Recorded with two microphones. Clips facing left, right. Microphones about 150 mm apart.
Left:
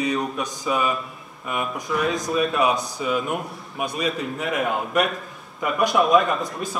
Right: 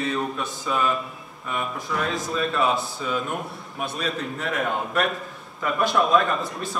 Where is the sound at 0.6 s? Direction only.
5° left (ahead or behind).